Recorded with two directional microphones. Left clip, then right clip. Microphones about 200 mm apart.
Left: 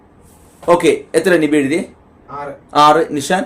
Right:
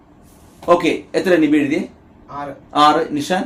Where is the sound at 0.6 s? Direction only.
50° left (ahead or behind).